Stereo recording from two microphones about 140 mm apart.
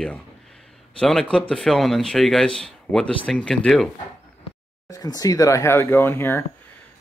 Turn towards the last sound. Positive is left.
turn(degrees=15)  # may be behind; listen again after turning